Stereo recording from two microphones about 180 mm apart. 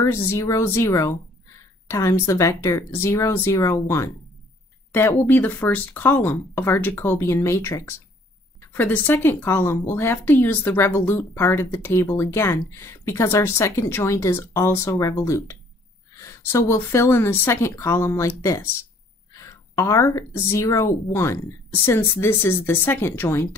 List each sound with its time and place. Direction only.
0.0 s speech: 15° left (ahead or behind)